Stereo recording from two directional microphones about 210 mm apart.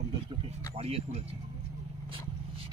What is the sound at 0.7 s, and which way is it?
Speech, 30° right (ahead or behind).